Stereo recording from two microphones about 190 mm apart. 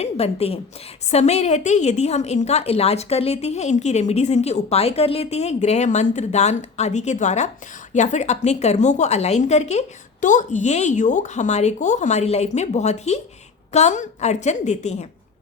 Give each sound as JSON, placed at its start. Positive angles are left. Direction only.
{"t": 0.0, "sound": "a woman's voice", "side_deg": 30}